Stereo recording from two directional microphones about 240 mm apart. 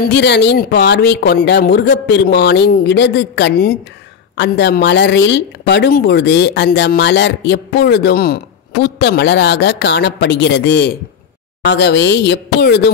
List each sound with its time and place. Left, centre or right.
0.0 s speech: left